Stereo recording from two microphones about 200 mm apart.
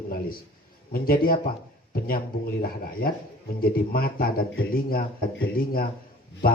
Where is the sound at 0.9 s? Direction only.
45° left (ahead or behind).